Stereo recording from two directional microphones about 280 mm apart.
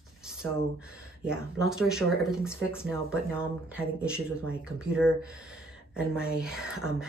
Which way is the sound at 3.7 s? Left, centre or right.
Centre.